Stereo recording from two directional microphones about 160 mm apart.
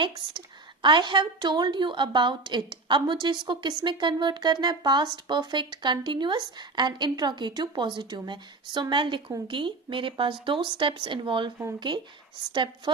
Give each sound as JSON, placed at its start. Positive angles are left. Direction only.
{"t": 0.0, "sound": "a woman's voice", "side_deg": -30}